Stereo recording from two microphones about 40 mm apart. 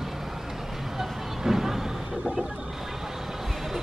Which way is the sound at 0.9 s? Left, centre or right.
Centre.